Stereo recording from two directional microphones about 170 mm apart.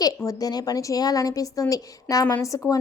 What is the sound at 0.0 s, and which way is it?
A woman's voice, 20° left (ahead or behind).